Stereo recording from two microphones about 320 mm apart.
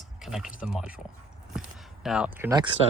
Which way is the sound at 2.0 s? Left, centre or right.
Centre.